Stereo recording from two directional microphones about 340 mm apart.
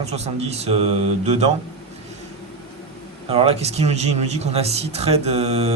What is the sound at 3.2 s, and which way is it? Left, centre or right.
A man's voice, centre.